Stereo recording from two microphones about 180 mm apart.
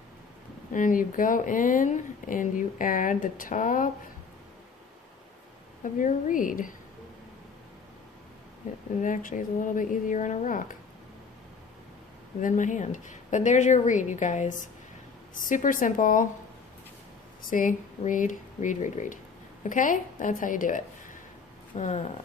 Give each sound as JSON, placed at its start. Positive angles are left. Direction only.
{"t": 0.7, "sound": "speech", "side_deg": 45}
{"t": 5.8, "sound": "speech", "side_deg": 45}
{"t": 9.0, "sound": "speech", "side_deg": 45}
{"t": 12.4, "sound": "speech", "side_deg": 45}
{"t": 17.5, "sound": "a woman's voice", "side_deg": 45}